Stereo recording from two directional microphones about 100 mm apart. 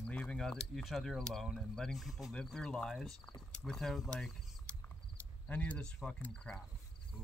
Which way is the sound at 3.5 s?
5° left (ahead or behind).